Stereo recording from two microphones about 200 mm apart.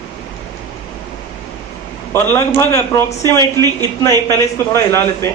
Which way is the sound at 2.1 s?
10° left (ahead or behind).